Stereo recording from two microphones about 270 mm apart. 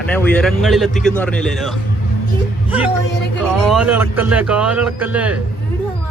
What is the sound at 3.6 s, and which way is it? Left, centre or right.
Speech, centre.